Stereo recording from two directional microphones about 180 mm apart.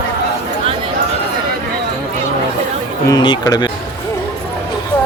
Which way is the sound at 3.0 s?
25° left (ahead or behind).